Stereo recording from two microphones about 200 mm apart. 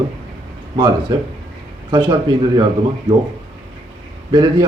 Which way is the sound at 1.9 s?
20° right (ahead or behind).